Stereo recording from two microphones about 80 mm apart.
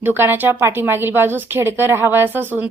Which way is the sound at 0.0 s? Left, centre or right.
Right.